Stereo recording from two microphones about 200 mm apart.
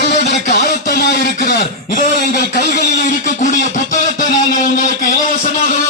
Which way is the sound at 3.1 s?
40° left (ahead or behind).